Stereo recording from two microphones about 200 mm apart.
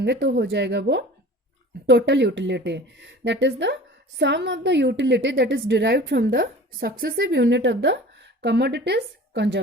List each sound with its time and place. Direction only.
0.0 s a woman's voice: 60° right (ahead or behind)